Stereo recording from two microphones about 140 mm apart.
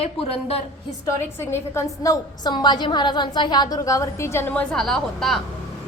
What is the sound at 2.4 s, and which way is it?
A woman's voice, 30° left (ahead or behind).